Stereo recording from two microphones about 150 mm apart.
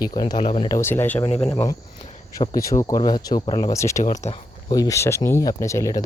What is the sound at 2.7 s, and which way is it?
Speech, 20° left (ahead or behind).